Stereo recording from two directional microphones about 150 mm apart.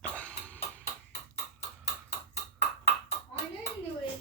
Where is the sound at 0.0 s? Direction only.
10° left (ahead or behind).